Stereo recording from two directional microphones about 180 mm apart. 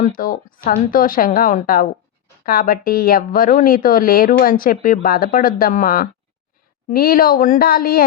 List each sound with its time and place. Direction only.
0.0 s a woman's voice: 50° left (ahead or behind)